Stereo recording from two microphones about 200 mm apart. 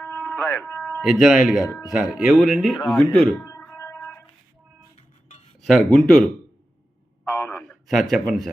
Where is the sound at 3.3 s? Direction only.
15° left (ahead or behind).